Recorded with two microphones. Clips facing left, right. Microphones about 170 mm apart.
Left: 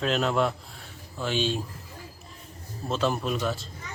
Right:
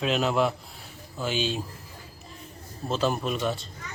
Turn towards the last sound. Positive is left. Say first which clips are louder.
# even
turn(degrees=0)  # may be behind; listen again after turning